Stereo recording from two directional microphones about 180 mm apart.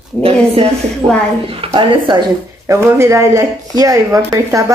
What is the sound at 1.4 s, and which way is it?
Speech, 30° right (ahead or behind).